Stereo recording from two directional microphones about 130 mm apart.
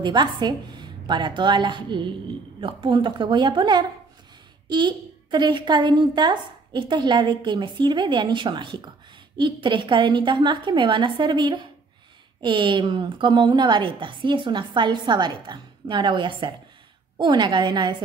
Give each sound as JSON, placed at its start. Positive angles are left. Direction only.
{"t": 0.0, "sound": "a child's voice", "side_deg": -35}